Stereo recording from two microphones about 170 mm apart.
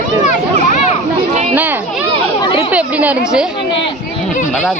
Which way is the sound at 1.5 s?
10° right (ahead or behind).